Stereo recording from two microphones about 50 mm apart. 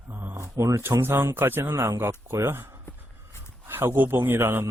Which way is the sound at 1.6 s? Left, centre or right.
Right.